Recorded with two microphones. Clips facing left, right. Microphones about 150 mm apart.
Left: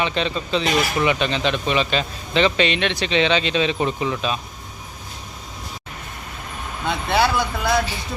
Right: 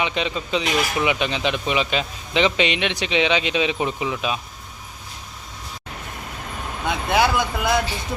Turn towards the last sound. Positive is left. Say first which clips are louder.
# even
turn(degrees=-15)  # may be behind; listen again after turning